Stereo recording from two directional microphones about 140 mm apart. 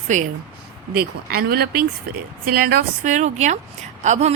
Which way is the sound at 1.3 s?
90° right.